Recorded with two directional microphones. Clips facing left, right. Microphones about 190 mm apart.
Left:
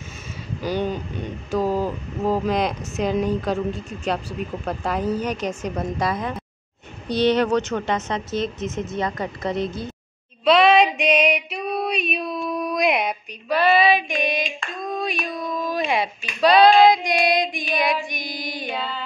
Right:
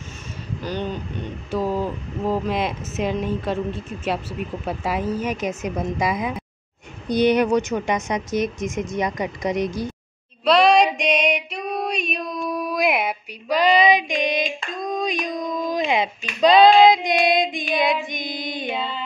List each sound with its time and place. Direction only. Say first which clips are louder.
0.6 s speech: left 4 dB; 10° left (ahead or behind)
2.4 s a woman's voice: left 2 dB; centre (ahead or behind)
10.4 s a woman's voice: even; centre (ahead or behind)
11.7 s a sound: left 1 dB; 5° left (ahead or behind)
13.5 s female singing: right 1 dB; 15° right (ahead or behind)